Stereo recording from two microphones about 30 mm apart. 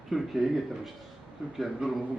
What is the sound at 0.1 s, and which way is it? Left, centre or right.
Speech, centre.